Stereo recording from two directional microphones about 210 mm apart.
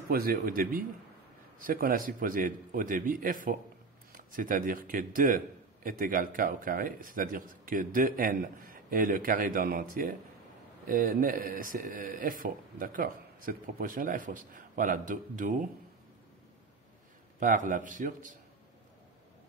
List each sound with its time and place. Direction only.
0.1 s speech: 45° right (ahead or behind)
17.4 s speech: 40° right (ahead or behind)